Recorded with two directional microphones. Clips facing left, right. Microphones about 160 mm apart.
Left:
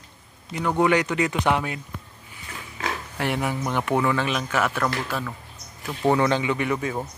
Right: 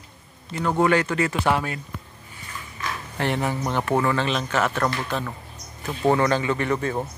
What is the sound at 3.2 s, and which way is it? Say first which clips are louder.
Speech: right 2 dB; 10° left (ahead or behind).